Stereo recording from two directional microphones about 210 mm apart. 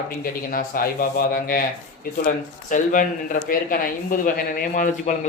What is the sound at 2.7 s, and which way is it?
Speech, 40° left (ahead or behind).